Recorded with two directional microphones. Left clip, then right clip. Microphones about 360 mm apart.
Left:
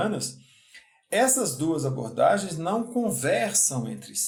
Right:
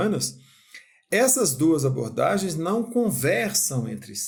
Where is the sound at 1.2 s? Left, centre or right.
Right.